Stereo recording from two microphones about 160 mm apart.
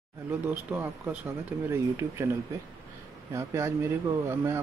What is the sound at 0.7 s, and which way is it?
Speech, 10° right (ahead or behind).